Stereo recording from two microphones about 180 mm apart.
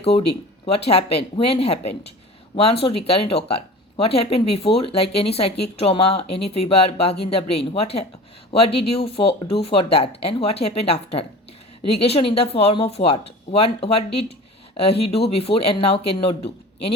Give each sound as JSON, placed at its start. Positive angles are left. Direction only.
{"t": 0.9, "sound": "speech", "side_deg": 35}